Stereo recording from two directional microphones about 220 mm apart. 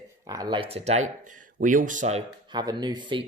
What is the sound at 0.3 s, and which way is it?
Speech, 15° right (ahead or behind).